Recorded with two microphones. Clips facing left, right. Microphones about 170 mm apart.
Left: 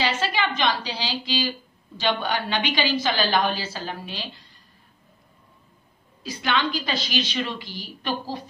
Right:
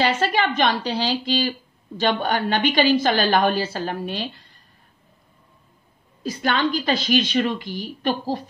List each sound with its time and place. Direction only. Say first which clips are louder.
0.0 s a woman's voice: right 4 dB; 50° right (ahead or behind)
6.2 s a woman's voice: right 3 dB; 45° right (ahead or behind)